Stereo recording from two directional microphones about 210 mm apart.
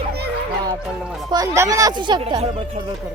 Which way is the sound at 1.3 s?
15° right (ahead or behind).